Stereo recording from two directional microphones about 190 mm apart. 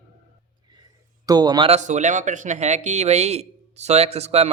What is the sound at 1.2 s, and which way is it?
Speech, 20° right (ahead or behind).